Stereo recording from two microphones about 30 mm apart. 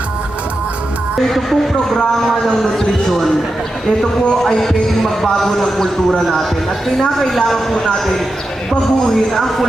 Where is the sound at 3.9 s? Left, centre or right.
Centre.